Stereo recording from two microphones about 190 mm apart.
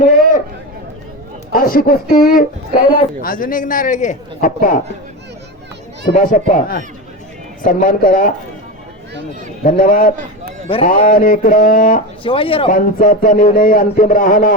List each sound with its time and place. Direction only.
0.0 s a sound: 45° left (ahead or behind)
1.5 s speech: 50° left (ahead or behind)
6.1 s speech: 45° left (ahead or behind)
9.6 s speech: 45° left (ahead or behind)
12.2 s speech: 30° left (ahead or behind)
12.7 s speech: 45° left (ahead or behind)